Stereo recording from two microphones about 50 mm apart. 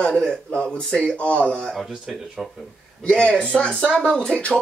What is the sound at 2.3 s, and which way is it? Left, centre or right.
Speech, centre.